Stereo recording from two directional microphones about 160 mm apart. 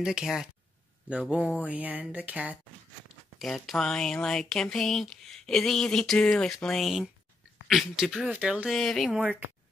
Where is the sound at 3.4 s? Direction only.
Centre (ahead or behind).